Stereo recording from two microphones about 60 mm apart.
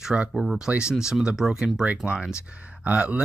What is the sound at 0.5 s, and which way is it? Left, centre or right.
Speech, centre.